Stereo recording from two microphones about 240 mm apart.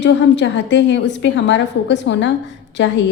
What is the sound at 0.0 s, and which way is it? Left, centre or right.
A woman's voice, left.